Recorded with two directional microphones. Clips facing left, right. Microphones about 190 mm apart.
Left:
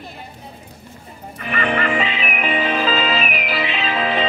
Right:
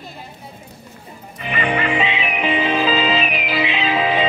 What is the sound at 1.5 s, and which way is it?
Music, 15° right (ahead or behind).